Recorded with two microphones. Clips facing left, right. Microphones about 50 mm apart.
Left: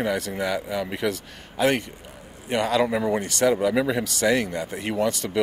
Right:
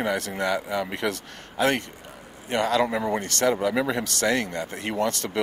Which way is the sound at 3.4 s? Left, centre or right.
Centre.